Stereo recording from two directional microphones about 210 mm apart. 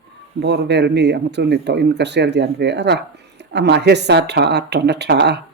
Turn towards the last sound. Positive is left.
turn(degrees=-55)  # may be behind; listen again after turning